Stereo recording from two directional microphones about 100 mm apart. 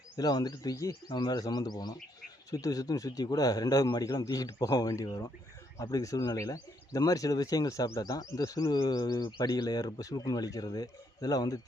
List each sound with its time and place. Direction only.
0.2 s speech: 40° left (ahead or behind)
1.0 s speech: 45° left (ahead or behind)